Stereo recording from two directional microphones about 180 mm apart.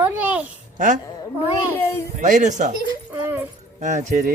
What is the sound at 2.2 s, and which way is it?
Speech, 45° right (ahead or behind).